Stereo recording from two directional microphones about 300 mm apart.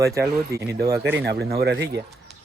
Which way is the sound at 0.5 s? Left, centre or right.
Centre.